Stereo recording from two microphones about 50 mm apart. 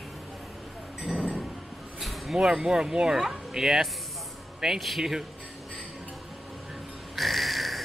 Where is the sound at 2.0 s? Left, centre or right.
Centre.